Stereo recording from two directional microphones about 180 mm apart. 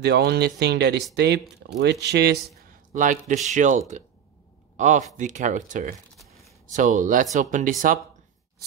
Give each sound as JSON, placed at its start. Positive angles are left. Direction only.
{"t": 0.0, "sound": "speech", "side_deg": -65}
{"t": 2.7, "sound": "speech", "side_deg": -45}